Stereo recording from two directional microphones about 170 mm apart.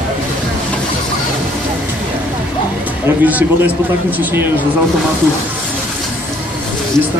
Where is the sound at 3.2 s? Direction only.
10° right (ahead or behind).